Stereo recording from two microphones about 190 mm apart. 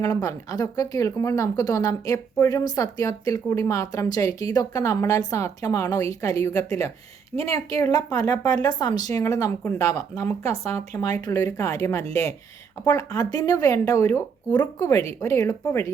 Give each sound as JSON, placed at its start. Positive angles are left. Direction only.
{"t": 0.0, "sound": "speech", "side_deg": 20}